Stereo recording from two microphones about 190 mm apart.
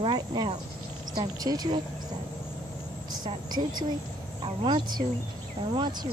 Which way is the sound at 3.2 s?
20° right (ahead or behind).